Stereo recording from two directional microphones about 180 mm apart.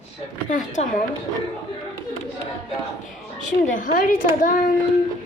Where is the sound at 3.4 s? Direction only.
45° left (ahead or behind).